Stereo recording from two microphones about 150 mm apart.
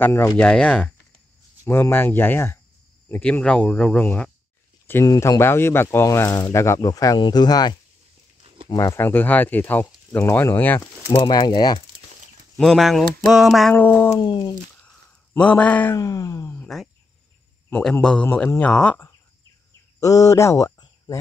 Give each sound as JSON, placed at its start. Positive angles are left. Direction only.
{"t": 0.0, "sound": "speech", "side_deg": 15}
{"t": 11.1, "sound": "speech", "side_deg": 30}
{"t": 12.5, "sound": "speech", "side_deg": 0}
{"t": 13.7, "sound": "speech", "side_deg": 15}
{"t": 14.2, "sound": "speech", "side_deg": 30}
{"t": 15.3, "sound": "speech", "side_deg": 10}
{"t": 16.0, "sound": "speech", "side_deg": 25}
{"t": 16.6, "sound": "cricket", "side_deg": 0}
{"t": 17.6, "sound": "speech", "side_deg": 10}
{"t": 20.0, "sound": "speech", "side_deg": 20}